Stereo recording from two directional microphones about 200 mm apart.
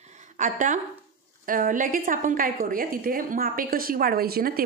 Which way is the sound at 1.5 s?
40° right (ahead or behind).